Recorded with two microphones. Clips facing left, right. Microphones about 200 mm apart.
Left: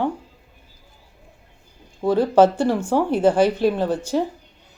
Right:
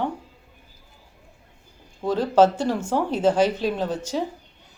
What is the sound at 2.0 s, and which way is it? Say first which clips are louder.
Speech: left 3 dB; 10° left (ahead or behind).